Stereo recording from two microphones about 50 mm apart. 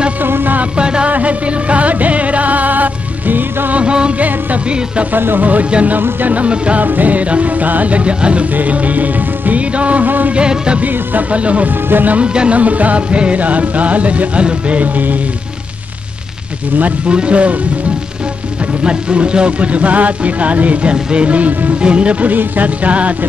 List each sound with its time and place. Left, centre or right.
0.2 s a sound: right
0.6 s a sound: centre
1.1 s music: right
3.8 s music: right
5.1 s music: right
5.9 s music: right
6.8 s music: right
10.3 s music: centre
10.8 s music: right
11.7 s music: right
12.2 s music: right
17.1 s music: right
18.9 s music: centre